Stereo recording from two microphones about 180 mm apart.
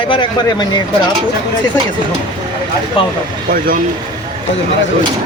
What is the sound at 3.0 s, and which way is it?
Speech, 30° left (ahead or behind).